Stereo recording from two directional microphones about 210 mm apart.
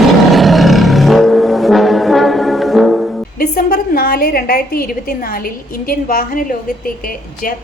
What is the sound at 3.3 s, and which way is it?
A woman's voice, 45° left (ahead or behind).